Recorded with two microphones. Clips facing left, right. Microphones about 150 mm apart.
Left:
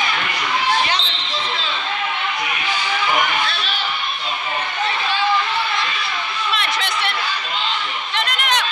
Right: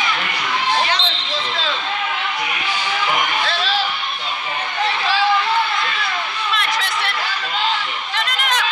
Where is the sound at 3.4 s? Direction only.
90° right.